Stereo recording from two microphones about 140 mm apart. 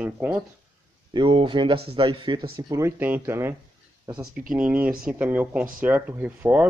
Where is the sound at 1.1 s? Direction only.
35° right (ahead or behind); by 3.5 s 15° right (ahead or behind).